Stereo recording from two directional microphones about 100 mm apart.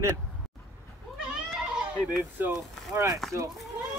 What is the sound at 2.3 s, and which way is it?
Speech, 20° right (ahead or behind).